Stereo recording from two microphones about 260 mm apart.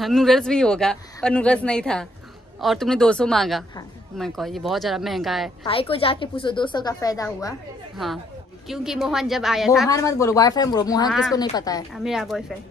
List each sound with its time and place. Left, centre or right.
0.0 s speech: centre
5.6 s a woman's voice: left
8.0 s speech: centre
9.8 s a woman's voice: centre
11.1 s speech: centre
11.5 s a woman's voice: centre
11.9 s speech: centre